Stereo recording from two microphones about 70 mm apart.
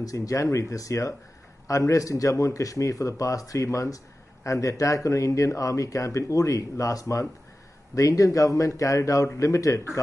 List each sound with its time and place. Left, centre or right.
0.0 s speech: left